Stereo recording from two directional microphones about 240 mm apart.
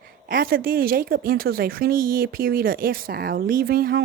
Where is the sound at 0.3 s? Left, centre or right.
Right.